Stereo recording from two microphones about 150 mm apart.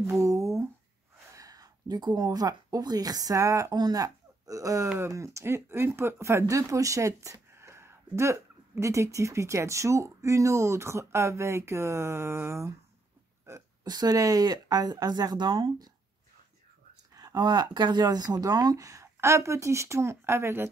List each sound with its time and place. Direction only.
0.0 s a sound: 20° right (ahead or behind)
1.3 s speech: 25° right (ahead or behind)
17.1 s speech: 25° right (ahead or behind)